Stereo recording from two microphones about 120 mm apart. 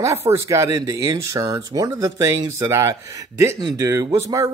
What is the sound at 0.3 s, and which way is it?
Speech, 25° right (ahead or behind).